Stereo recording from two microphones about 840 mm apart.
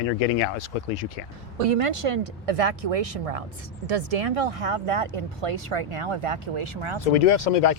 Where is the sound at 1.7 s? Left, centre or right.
Right.